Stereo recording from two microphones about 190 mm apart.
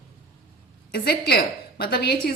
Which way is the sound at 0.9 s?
55° left (ahead or behind).